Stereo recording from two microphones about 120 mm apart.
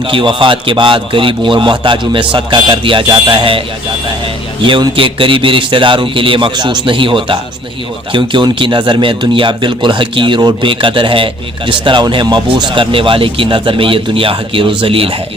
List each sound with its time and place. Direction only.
0.1 s speech: 45° right (ahead or behind)
4.6 s speech: 45° right (ahead or behind)